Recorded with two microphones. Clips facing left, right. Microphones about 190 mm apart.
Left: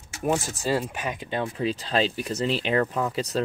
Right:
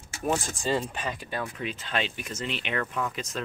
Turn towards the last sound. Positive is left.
turn(degrees=35)  # may be behind; listen again after turning